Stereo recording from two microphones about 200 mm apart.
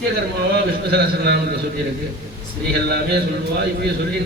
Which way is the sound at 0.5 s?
50° right (ahead or behind).